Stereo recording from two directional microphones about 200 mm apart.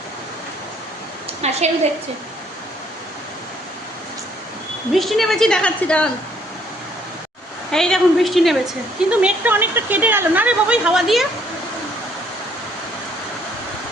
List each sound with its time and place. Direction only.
1.4 s a woman's voice: 35° right (ahead or behind)
4.9 s a woman's voice: centre (ahead or behind)
7.7 s a woman's voice: 5° left (ahead or behind)